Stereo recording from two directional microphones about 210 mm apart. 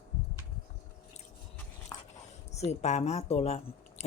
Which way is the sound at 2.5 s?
30° left (ahead or behind).